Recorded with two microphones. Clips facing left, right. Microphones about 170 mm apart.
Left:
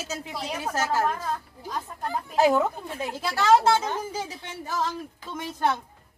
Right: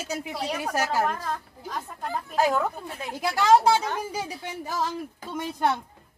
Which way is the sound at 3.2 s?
15° right (ahead or behind).